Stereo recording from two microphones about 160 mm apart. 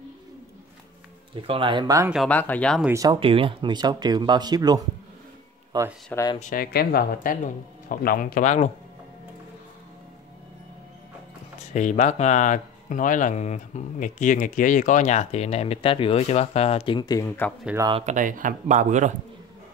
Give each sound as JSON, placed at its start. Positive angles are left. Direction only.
{"t": 1.3, "sound": "speech", "side_deg": -30}
{"t": 2.2, "sound": "speech", "side_deg": 10}
{"t": 2.9, "sound": "speech", "side_deg": -20}
{"t": 3.2, "sound": "speech", "side_deg": -35}
{"t": 6.1, "sound": "speech", "side_deg": 25}
{"t": 6.4, "sound": "speech", "side_deg": 65}
{"t": 11.7, "sound": "speech", "side_deg": 50}
{"t": 17.9, "sound": "speech", "side_deg": -50}